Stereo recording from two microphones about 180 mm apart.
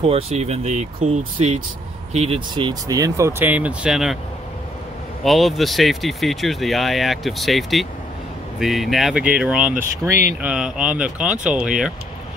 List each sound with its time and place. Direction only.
0.0 s speech: 35° right (ahead or behind); by 4.2 s 5° right (ahead or behind)
5.2 s speech: centre (ahead or behind)